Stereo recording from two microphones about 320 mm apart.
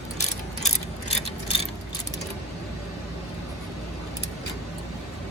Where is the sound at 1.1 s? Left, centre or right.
Centre.